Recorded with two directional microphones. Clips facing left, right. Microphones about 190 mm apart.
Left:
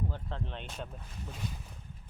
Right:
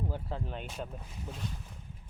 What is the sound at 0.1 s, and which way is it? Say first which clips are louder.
Speech: right 2 dB; 5° right (ahead or behind).